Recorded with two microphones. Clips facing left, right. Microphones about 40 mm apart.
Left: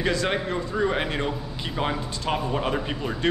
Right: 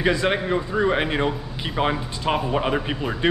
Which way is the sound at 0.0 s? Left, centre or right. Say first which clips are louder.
Right 4 dB; centre.